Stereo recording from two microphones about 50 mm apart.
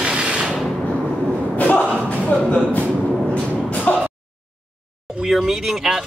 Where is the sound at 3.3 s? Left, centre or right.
Left.